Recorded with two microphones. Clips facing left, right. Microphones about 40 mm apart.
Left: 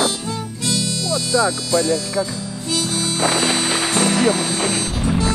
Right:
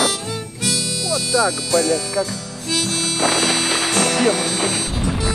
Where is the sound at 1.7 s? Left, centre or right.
Centre.